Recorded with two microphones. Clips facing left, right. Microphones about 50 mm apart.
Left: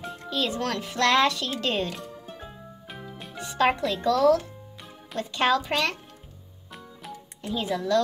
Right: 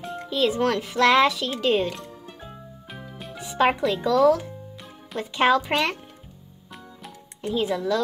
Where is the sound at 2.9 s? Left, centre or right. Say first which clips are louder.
Right 1 dB; centre.